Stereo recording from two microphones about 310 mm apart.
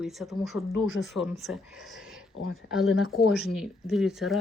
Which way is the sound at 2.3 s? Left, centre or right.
Left.